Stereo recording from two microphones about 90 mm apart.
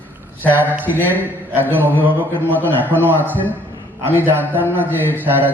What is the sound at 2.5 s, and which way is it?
Speech, 20° left (ahead or behind).